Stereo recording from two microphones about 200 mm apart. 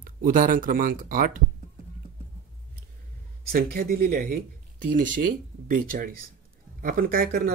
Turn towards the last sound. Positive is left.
turn(degrees=-45)  # may be behind; listen again after turning